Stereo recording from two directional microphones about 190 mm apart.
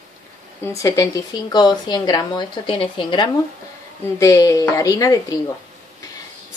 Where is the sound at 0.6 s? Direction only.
15° left (ahead or behind).